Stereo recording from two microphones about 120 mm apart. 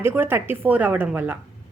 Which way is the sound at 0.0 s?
20° right (ahead or behind).